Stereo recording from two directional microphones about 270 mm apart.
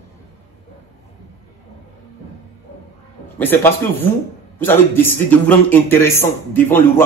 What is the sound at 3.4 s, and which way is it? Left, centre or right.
A man's voice, centre.